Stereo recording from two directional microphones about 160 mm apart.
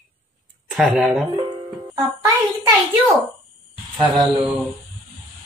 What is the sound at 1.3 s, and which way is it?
Music, 25° right (ahead or behind).